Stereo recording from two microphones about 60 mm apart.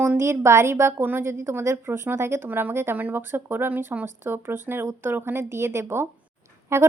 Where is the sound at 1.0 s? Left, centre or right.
Right.